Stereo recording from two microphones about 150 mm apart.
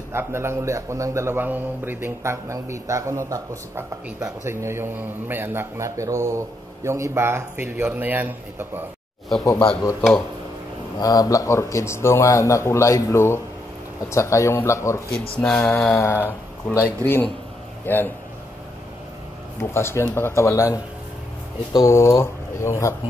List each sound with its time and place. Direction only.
0.1 s a man's voice: 15° right (ahead or behind)
9.4 s a man's voice: 20° left (ahead or behind)
11.0 s a man's voice: 25° left (ahead or behind)
19.6 s a man's voice: 15° left (ahead or behind)